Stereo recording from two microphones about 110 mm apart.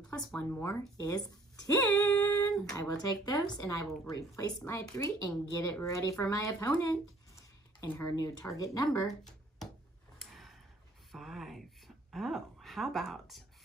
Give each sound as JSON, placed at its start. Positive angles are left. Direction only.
{"t": 0.4, "sound": "speech", "side_deg": 25}
{"t": 2.0, "sound": "singing", "side_deg": 20}
{"t": 2.7, "sound": "speech", "side_deg": 30}
{"t": 11.1, "sound": "speech", "side_deg": 0}